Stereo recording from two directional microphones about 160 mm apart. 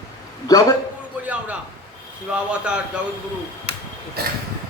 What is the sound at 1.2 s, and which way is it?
Speech, 10° right (ahead or behind).